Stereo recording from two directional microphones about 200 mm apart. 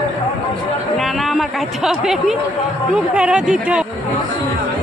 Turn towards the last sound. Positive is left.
turn(degrees=-5)  # may be behind; listen again after turning